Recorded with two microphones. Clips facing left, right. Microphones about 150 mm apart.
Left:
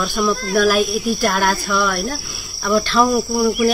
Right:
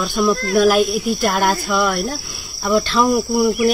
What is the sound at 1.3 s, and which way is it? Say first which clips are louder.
Cricket: right 1 dB; 25° right (ahead or behind).